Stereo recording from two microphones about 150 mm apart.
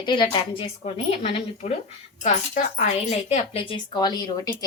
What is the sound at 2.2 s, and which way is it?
A woman's voice, 55° left (ahead or behind).